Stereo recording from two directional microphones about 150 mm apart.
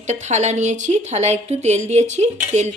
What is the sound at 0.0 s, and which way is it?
Speech, 50° right (ahead or behind).